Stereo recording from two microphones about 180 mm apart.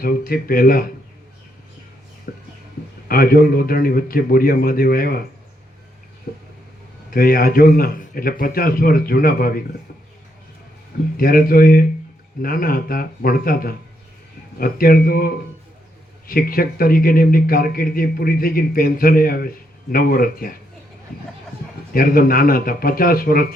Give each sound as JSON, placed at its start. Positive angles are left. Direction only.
{"t": 0.0, "sound": "a man's voice", "side_deg": 55}
{"t": 2.3, "sound": "a sound", "side_deg": 55}
{"t": 3.1, "sound": "a man's voice", "side_deg": 55}
{"t": 6.3, "sound": "a man's voice", "side_deg": 50}
{"t": 11.2, "sound": "a man's voice", "side_deg": 55}
{"t": 21.9, "sound": "a man's voice", "side_deg": 55}